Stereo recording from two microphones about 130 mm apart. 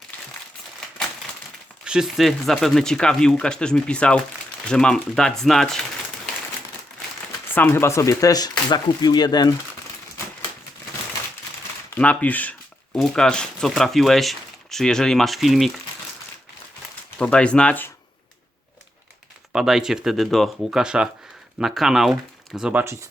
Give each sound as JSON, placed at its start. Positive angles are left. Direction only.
{"t": 1.8, "sound": "speech", "side_deg": -5}
{"t": 7.4, "sound": "speech", "side_deg": 15}
{"t": 11.9, "sound": "speech", "side_deg": 10}
{"t": 17.2, "sound": "speech", "side_deg": 10}
{"t": 19.5, "sound": "speech", "side_deg": -5}
{"t": 22.8, "sound": "speech", "side_deg": -20}